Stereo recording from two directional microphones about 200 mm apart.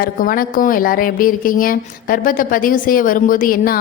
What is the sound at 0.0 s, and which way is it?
Speech, 45° left (ahead or behind).